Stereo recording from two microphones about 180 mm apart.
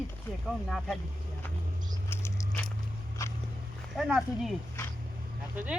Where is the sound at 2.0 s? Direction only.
15° left (ahead or behind).